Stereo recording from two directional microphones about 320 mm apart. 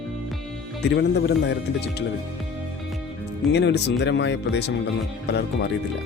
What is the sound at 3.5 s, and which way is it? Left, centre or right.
Speech, left.